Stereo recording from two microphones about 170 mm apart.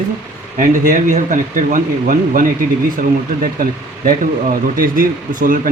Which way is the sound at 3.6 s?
55° right (ahead or behind).